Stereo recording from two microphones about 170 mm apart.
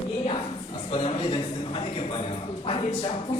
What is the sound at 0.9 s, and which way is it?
A man's voice, 35° left (ahead or behind).